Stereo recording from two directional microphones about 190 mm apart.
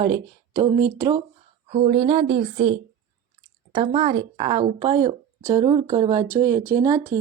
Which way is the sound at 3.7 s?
25° right (ahead or behind).